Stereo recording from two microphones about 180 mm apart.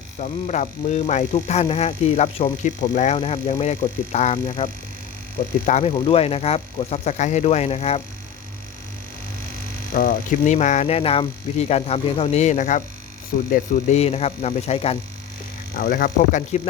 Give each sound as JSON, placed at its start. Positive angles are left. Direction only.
{"t": 0.2, "sound": "speech", "side_deg": 40}
{"t": 5.6, "sound": "speech", "side_deg": 40}
{"t": 9.9, "sound": "speech", "side_deg": 55}
{"t": 13.9, "sound": "speech", "side_deg": 35}
{"t": 15.7, "sound": "speech", "side_deg": 55}